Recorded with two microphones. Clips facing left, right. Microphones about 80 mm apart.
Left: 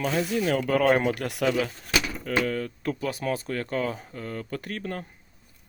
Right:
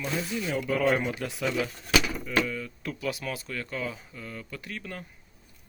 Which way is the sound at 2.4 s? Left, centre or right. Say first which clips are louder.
Left 6 dB; left.